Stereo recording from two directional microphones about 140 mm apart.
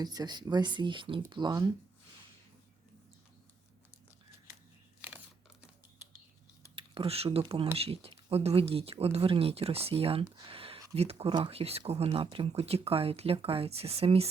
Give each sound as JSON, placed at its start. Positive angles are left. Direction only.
{"t": 0.0, "sound": "speech", "side_deg": -30}
{"t": 6.7, "sound": "speech", "side_deg": -40}
{"t": 10.5, "sound": "a sound", "side_deg": -40}
{"t": 10.9, "sound": "speech", "side_deg": -45}